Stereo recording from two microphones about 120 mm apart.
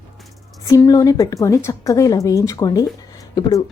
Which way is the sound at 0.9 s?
30° left (ahead or behind).